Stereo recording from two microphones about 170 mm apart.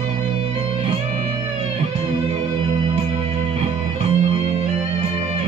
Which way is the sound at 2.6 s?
35° right (ahead or behind).